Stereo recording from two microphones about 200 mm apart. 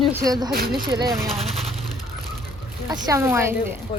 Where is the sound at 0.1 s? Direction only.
15° right (ahead or behind).